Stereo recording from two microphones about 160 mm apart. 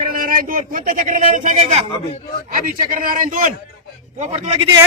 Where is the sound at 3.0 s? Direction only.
60° right (ahead or behind).